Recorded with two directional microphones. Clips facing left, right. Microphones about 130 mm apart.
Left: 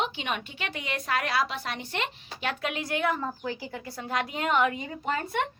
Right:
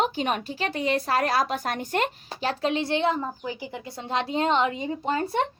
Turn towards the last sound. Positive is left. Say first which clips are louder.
# right 4 dB
turn(degrees=-30)  # may be behind; listen again after turning